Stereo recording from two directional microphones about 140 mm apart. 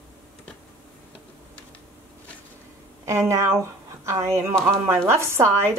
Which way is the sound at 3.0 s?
20° right (ahead or behind).